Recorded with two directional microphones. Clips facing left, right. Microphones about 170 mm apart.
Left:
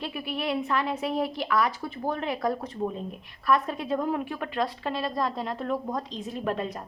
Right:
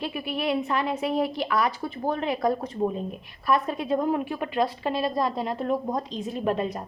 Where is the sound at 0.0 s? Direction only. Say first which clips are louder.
Right 3 dB; 15° right (ahead or behind).